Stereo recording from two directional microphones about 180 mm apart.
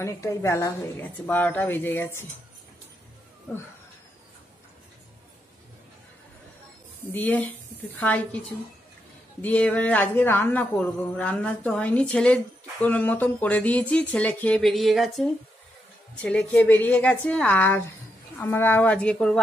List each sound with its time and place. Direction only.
0.0 s speech: 15° left (ahead or behind)
7.1 s speech: 10° left (ahead or behind)
9.4 s speech: 10° left (ahead or behind)